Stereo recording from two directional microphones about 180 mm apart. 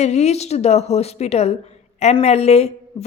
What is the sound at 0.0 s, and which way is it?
Speech, 40° left (ahead or behind).